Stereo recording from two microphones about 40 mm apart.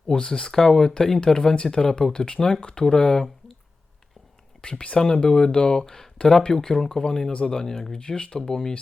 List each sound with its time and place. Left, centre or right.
0.2 s speech: left
4.6 s speech: left